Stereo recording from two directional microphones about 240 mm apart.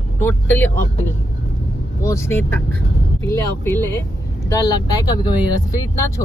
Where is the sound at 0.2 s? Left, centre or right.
Centre.